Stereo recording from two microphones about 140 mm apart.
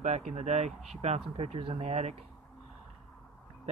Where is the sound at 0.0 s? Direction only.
55° right (ahead or behind).